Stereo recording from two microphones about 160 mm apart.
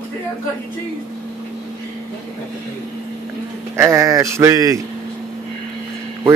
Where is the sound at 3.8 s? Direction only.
20° right (ahead or behind).